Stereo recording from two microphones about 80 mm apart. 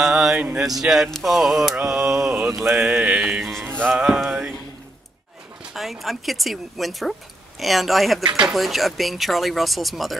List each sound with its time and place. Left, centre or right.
0.0 s speech: centre
1.8 s mantra: centre
3.6 s mantra: right
3.9 s mantra: centre
5.7 s speech: centre